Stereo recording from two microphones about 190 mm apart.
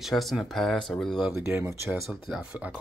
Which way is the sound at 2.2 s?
Centre (ahead or behind).